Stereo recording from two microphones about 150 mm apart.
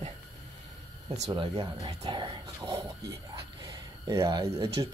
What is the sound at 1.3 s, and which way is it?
Speech, 30° right (ahead or behind).